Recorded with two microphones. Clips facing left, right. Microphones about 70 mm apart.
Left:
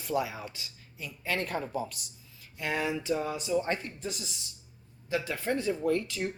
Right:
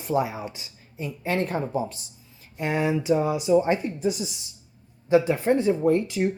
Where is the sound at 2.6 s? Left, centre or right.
Right.